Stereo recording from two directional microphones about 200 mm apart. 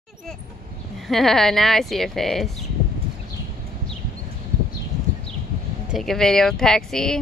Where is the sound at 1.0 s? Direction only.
Centre (ahead or behind).